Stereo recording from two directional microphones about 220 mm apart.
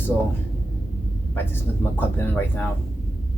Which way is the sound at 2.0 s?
10° left (ahead or behind).